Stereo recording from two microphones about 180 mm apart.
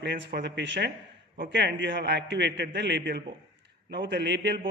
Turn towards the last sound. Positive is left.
turn(degrees=-70)  # may be behind; listen again after turning